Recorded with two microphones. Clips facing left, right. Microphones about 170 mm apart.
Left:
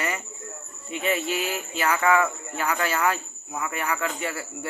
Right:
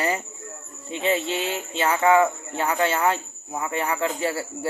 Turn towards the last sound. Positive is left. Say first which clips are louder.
# right 5 dB
turn(degrees=-30)  # may be behind; listen again after turning